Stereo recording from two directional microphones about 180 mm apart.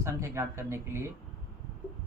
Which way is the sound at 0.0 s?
15° right (ahead or behind).